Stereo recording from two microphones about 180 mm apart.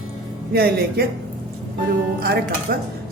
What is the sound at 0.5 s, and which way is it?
Speech, 60° right (ahead or behind).